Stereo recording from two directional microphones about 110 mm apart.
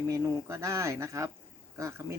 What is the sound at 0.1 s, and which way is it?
Speech, 25° right (ahead or behind).